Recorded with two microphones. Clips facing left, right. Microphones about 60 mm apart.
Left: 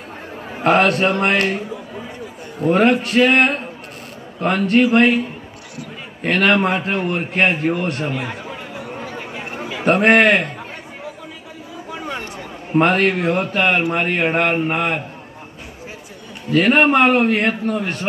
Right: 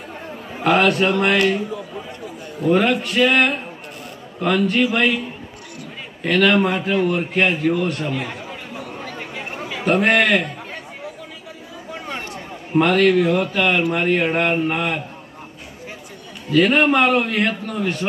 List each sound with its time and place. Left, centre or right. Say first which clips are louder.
0.7 s a man's voice: left 1 dB; left
2.6 s a man's voice: left 2 dB; left
6.2 s a man's voice: even; left
9.8 s a man's voice: left 3 dB; left
12.7 s a man's voice: right 1 dB; left
16.5 s a man's voice: left 1 dB; left